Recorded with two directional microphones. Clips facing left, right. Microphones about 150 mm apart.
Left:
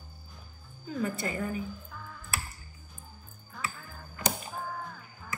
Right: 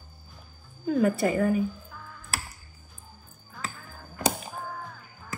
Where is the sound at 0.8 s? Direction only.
70° right (ahead or behind).